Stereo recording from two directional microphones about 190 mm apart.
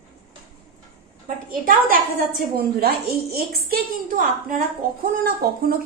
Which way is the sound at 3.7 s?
50° right (ahead or behind).